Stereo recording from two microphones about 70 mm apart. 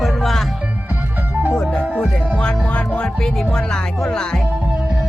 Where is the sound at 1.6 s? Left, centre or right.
Centre.